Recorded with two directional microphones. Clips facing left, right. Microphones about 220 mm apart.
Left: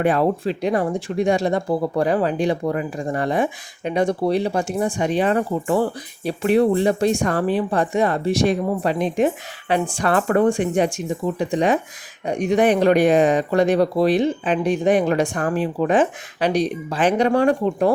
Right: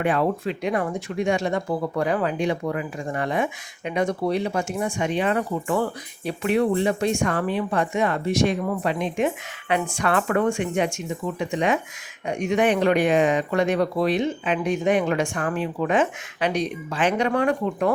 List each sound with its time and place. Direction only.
0.0 s speech: 35° left (ahead or behind)